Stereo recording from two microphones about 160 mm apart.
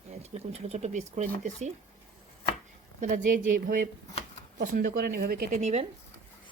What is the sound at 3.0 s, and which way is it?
Speech, 50° right (ahead or behind).